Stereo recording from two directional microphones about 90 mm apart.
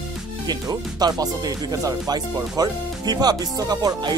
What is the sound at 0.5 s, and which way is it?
Speech, 45° right (ahead or behind).